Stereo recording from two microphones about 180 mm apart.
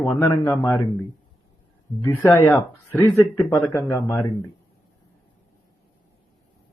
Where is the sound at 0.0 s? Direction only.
10° left (ahead or behind).